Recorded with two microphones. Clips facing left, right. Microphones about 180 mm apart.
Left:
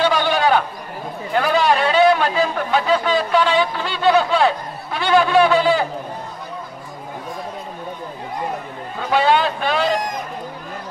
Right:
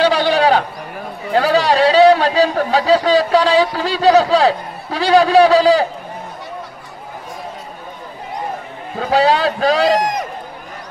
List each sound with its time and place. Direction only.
0.0 s a sound: 35° right (ahead or behind)
1.3 s a man's voice: 35° right (ahead or behind)
8.9 s a man's voice: 35° right (ahead or behind)
9.9 s run: 75° right (ahead or behind)